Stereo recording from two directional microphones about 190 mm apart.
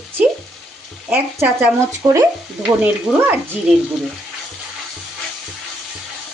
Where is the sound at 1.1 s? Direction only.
10° right (ahead or behind).